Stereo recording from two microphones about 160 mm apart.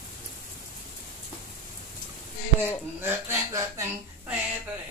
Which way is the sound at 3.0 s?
15° right (ahead or behind).